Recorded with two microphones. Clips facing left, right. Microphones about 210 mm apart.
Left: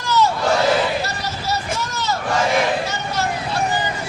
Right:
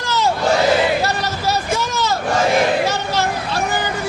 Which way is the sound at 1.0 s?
90° right.